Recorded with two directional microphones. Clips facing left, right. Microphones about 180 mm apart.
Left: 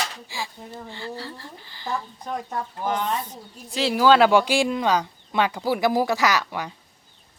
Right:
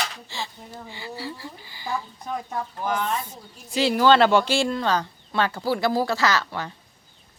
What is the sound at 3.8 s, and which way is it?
Speech, centre (ahead or behind).